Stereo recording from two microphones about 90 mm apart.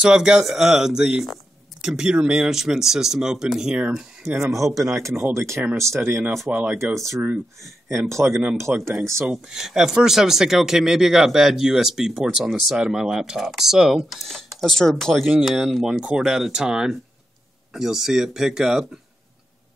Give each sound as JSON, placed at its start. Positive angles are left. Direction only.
{"t": 0.0, "sound": "speech", "side_deg": -10}
{"t": 4.3, "sound": "speech", "side_deg": -25}
{"t": 4.6, "sound": "speech", "side_deg": 0}
{"t": 4.8, "sound": "speech", "side_deg": -35}
{"t": 8.2, "sound": "speech", "side_deg": -20}
{"t": 8.5, "sound": "speech", "side_deg": -30}
{"t": 9.2, "sound": "speech", "side_deg": -5}